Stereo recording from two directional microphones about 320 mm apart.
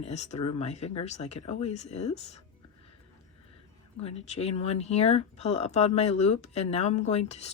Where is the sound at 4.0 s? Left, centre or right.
Centre.